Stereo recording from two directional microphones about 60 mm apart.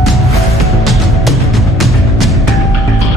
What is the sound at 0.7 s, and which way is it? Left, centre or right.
Music, centre.